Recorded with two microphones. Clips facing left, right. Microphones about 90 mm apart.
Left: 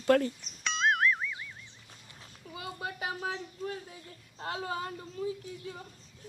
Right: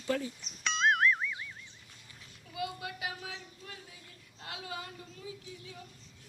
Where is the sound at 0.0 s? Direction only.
60° left (ahead or behind).